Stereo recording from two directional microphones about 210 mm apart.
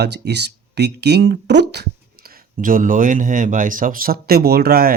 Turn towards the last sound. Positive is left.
turn(degrees=-45)  # may be behind; listen again after turning